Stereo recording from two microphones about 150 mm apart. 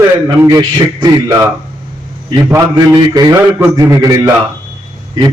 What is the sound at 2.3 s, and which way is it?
A man's voice, 25° right (ahead or behind).